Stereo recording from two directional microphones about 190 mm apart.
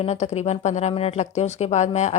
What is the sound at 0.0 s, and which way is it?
Speech, 35° left (ahead or behind).